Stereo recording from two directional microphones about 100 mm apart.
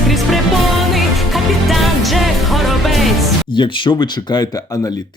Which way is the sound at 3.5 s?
55° left (ahead or behind).